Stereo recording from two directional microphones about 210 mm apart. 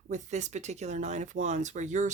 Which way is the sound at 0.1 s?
35° right (ahead or behind).